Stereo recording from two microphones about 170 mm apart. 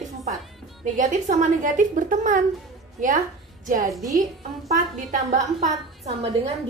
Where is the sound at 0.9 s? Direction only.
50° right (ahead or behind).